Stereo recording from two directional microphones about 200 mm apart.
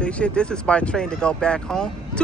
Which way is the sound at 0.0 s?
5° left (ahead or behind).